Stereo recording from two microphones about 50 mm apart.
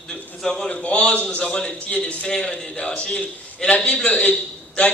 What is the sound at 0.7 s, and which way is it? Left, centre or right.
A man's voice, left.